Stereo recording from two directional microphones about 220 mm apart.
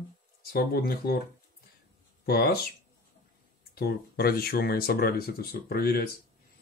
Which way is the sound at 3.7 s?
45° left (ahead or behind).